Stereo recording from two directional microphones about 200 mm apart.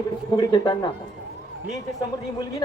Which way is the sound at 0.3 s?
20° left (ahead or behind).